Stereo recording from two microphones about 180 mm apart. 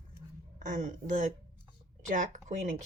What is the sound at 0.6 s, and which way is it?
Speech, 45° right (ahead or behind).